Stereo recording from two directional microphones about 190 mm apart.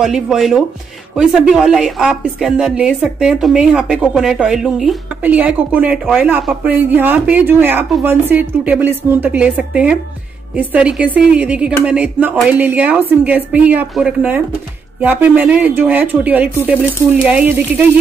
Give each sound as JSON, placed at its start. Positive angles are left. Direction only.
{"t": 0.0, "sound": "a woman's voice", "side_deg": 0}